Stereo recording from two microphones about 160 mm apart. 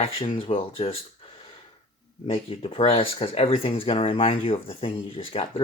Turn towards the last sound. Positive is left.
turn(degrees=35)  # may be behind; listen again after turning